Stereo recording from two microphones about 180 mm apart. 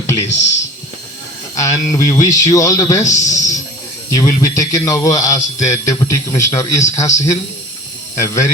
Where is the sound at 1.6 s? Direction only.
20° left (ahead or behind).